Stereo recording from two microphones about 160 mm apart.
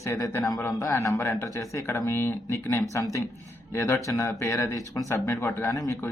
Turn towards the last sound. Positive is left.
turn(degrees=20)  # may be behind; listen again after turning